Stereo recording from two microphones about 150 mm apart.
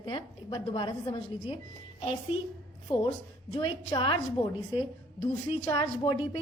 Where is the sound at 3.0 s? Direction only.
35° left (ahead or behind).